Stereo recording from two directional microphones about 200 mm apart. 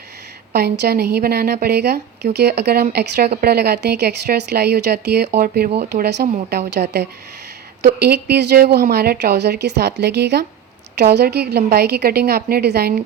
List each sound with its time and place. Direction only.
0.5 s a woman's voice: 55° right (ahead or behind)